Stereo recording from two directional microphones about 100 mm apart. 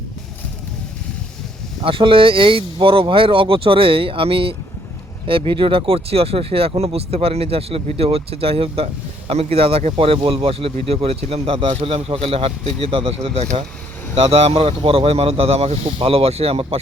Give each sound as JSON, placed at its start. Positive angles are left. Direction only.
{"t": 1.8, "sound": "speech", "side_deg": -60}
{"t": 14.2, "sound": "speech", "side_deg": -85}
{"t": 16.0, "sound": "speech", "side_deg": -70}